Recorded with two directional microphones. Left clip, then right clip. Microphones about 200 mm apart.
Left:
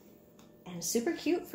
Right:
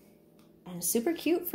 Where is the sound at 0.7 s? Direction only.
45° right (ahead or behind).